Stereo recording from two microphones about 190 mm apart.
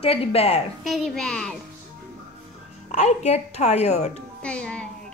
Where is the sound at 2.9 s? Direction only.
35° left (ahead or behind).